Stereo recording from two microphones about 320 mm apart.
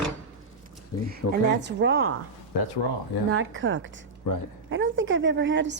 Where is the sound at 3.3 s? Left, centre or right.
Right.